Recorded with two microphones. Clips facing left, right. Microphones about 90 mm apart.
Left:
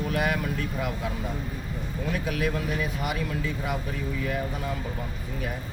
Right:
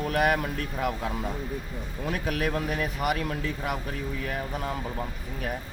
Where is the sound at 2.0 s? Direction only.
55° right (ahead or behind).